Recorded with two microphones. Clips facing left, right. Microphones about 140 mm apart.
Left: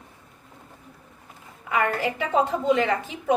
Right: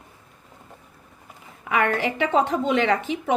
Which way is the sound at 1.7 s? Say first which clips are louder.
Right 2 dB; 90° right.